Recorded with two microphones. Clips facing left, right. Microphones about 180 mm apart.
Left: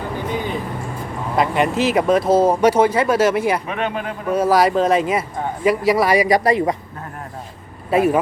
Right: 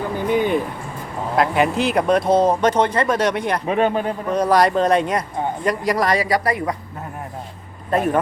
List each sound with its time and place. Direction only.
1.4 s speech: centre (ahead or behind)
3.7 s speech: 35° right (ahead or behind)
4.3 s speech: 5° left (ahead or behind)
6.2 s speech: 20° left (ahead or behind)
7.9 s speech: 10° left (ahead or behind)